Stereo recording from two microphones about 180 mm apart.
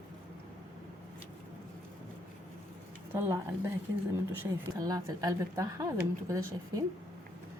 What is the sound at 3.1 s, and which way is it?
Speech, 15° right (ahead or behind).